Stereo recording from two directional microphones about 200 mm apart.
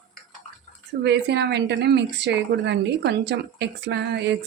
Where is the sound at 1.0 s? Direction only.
55° right (ahead or behind).